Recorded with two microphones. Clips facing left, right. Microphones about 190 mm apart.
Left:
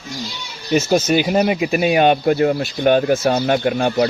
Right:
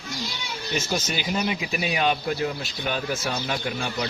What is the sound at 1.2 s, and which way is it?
Speech, 55° left (ahead or behind).